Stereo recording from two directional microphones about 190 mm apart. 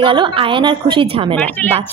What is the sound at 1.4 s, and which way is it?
Speech, 10° left (ahead or behind).